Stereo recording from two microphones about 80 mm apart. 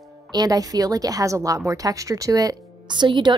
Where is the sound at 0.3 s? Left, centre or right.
Right.